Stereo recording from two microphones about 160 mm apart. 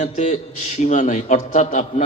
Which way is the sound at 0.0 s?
50° left (ahead or behind).